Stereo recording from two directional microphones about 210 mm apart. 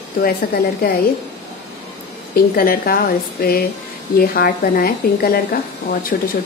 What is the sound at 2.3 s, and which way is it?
A woman's voice, 45° left (ahead or behind).